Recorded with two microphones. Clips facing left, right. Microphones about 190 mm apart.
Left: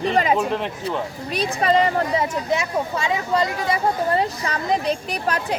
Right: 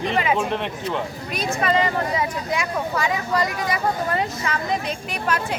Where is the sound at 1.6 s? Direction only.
30° left (ahead or behind).